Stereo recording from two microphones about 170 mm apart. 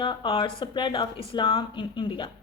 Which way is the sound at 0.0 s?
30° left (ahead or behind).